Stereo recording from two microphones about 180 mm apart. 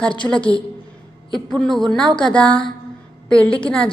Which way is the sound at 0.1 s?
30° left (ahead or behind).